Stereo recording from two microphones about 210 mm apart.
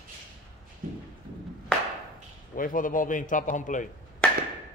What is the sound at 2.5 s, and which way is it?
A man's voice, 40° left (ahead or behind).